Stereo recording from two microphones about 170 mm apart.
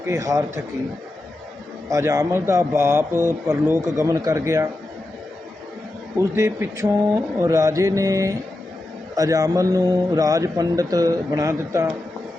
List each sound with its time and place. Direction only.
0.0 s a man's voice: 20° right (ahead or behind)
1.9 s a man's voice: 20° right (ahead or behind)
6.1 s a man's voice: 15° right (ahead or behind)